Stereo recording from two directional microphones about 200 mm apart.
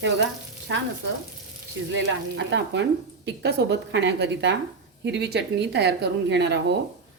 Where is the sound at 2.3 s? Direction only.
60° right (ahead or behind).